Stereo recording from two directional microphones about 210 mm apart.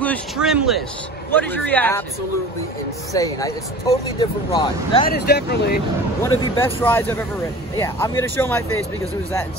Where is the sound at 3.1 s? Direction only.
15° left (ahead or behind).